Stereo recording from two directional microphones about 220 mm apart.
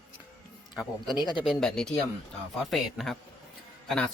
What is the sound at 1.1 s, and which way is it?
Speech, 20° left (ahead or behind).